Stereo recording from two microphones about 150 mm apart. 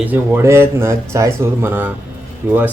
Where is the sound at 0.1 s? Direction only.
15° right (ahead or behind).